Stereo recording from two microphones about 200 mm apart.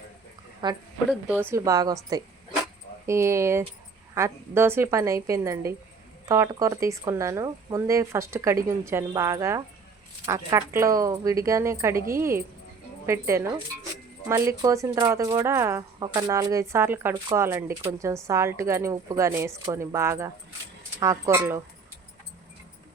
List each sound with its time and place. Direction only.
0.6 s speech: 20° right (ahead or behind)